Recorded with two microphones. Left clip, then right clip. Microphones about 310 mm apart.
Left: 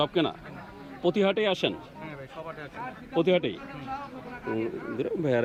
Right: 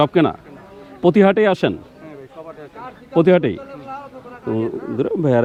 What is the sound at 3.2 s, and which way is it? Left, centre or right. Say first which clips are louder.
Speech: right 10 dB; right.